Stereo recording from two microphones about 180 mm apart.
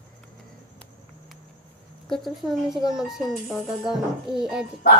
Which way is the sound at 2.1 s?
Centre (ahead or behind).